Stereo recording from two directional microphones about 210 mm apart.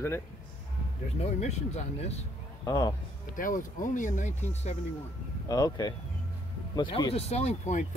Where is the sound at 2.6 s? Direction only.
15° left (ahead or behind).